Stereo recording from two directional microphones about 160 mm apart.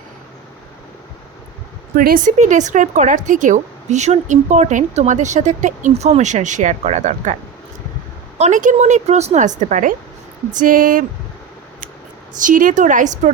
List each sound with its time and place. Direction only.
2.0 s speech: 60° right (ahead or behind)
8.4 s speech: 50° right (ahead or behind)
12.4 s speech: 55° right (ahead or behind)